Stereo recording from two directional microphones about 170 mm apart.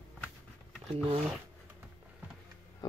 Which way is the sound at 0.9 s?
35° right (ahead or behind).